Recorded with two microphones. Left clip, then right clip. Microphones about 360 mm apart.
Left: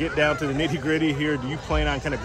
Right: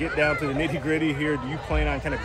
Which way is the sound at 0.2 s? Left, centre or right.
Left.